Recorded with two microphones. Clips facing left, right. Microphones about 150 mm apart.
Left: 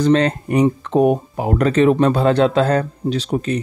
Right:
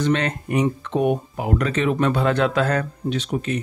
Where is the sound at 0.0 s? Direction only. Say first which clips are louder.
Left 6 dB; 35° left (ahead or behind).